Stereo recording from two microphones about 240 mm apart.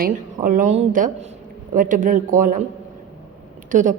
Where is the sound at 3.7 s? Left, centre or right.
Right.